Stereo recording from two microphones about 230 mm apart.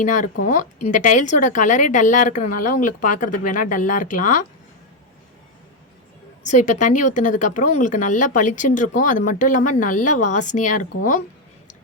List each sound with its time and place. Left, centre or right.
0.0 s speech: left
6.4 s speech: left